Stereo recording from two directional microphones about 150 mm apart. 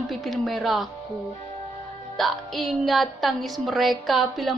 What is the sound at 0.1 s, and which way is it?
Speech, centre (ahead or behind).